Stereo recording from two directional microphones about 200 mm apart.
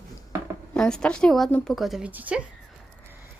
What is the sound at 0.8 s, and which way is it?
A woman's voice, 5° left (ahead or behind).